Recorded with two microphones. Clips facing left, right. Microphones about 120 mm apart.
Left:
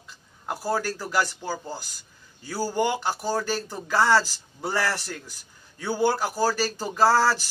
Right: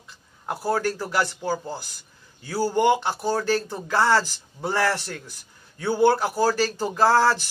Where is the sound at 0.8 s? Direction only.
20° right (ahead or behind).